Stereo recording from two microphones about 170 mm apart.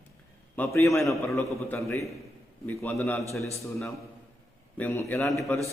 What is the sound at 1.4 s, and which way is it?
Speech, 15° left (ahead or behind).